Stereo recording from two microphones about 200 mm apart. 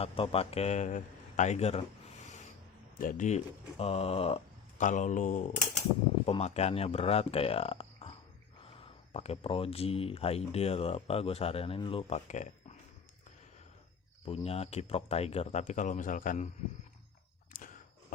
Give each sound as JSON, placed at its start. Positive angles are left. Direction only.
{"t": 0.0, "sound": "speech", "side_deg": 30}
{"t": 3.0, "sound": "speech", "side_deg": 40}
{"t": 14.3, "sound": "speech", "side_deg": 30}
{"t": 17.5, "sound": "a sound", "side_deg": 45}